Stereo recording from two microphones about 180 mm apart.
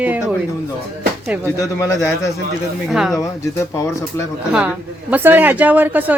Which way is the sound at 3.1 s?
15° left (ahead or behind).